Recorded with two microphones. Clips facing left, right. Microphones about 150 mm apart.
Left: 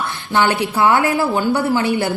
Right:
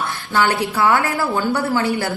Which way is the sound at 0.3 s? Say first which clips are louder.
Left 2 dB; 20° left (ahead or behind).